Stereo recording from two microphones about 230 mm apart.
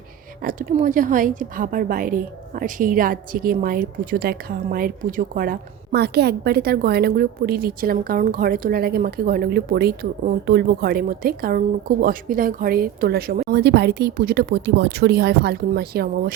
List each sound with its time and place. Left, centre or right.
0.4 s a woman's voice: right